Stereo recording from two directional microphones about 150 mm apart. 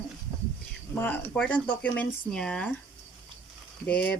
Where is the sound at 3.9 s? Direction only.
10° left (ahead or behind).